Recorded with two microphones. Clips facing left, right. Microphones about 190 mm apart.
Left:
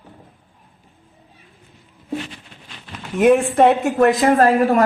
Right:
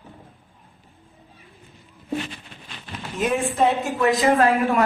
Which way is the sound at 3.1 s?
65° left (ahead or behind).